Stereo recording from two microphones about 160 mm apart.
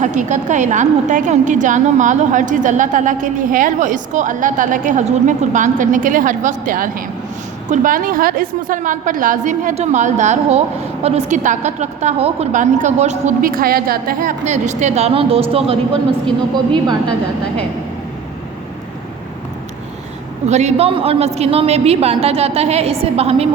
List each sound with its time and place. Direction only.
0.0 s a woman's voice: 50° right (ahead or behind)
13.4 s a woman's voice: 65° right (ahead or behind); by 15.8 s 35° right (ahead or behind)
20.5 s a woman's voice: 45° right (ahead or behind)